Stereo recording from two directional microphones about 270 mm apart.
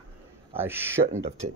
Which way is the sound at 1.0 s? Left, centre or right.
Right.